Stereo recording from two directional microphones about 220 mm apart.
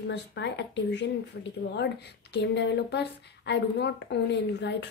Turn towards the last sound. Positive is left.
turn(degrees=50)  # may be behind; listen again after turning